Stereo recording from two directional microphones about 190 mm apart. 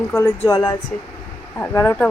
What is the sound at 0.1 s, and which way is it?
Speech, 15° left (ahead or behind).